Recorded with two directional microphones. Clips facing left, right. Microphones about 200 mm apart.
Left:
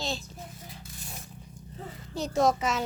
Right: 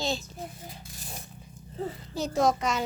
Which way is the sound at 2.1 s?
Centre (ahead or behind).